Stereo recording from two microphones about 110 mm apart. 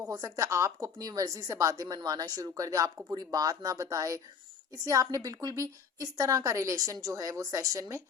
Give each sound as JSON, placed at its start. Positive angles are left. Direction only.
{"t": 0.1, "sound": "a woman's voice", "side_deg": -30}